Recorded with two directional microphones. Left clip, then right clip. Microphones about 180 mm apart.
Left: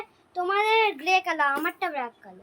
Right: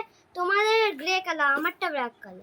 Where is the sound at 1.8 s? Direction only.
20° right (ahead or behind).